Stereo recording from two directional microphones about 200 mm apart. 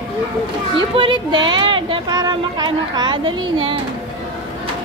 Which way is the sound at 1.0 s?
25° right (ahead or behind).